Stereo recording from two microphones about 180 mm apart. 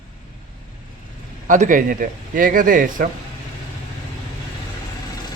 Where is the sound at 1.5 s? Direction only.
45° right (ahead or behind).